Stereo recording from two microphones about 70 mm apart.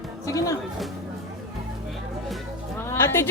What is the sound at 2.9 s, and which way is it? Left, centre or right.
Speech, left.